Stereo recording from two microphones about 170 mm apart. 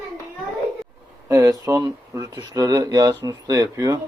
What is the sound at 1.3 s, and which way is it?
Speech, 20° right (ahead or behind).